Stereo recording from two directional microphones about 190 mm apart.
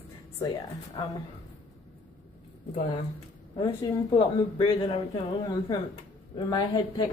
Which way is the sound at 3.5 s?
20° left (ahead or behind).